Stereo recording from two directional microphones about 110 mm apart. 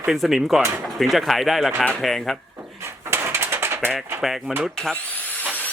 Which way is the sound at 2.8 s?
25° right (ahead or behind).